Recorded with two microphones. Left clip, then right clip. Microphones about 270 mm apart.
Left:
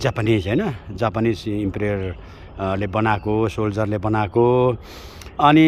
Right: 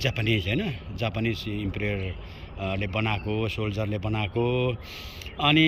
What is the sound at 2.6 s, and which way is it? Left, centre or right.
Speech, centre.